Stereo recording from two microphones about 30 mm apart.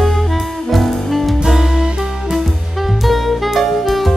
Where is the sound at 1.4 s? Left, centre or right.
Centre.